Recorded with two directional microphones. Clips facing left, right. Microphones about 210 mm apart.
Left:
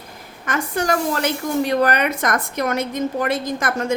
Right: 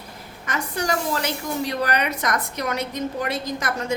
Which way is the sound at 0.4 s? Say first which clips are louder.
Left 4 dB; 50° left (ahead or behind).